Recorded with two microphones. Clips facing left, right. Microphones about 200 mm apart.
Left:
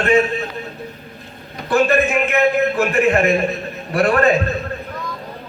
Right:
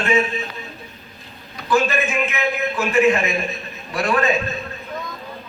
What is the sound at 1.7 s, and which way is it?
Speech, 60° left (ahead or behind).